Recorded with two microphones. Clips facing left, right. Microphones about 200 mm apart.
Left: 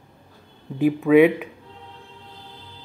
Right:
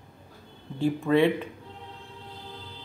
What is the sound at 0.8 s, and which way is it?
Speech, 10° left (ahead or behind).